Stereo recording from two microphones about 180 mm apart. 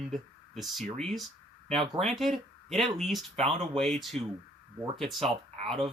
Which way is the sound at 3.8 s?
Centre (ahead or behind).